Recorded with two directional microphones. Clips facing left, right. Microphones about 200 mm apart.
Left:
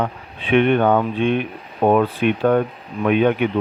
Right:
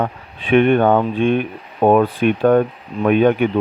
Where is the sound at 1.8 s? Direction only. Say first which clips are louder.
Right 3 dB; 40° right (ahead or behind).